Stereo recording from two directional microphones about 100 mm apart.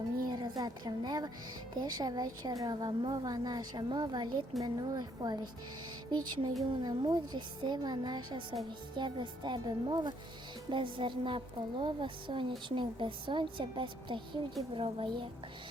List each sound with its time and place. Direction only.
0.3 s a woman's voice: 45° right (ahead or behind)